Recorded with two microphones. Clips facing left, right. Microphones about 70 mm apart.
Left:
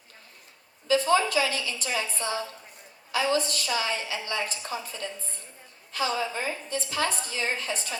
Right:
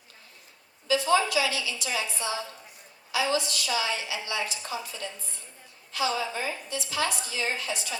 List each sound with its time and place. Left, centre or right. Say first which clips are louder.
0.9 s a woman's voice: left 1 dB; left